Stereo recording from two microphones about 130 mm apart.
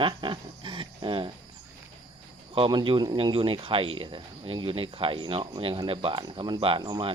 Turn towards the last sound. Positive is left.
turn(degrees=-35)  # may be behind; listen again after turning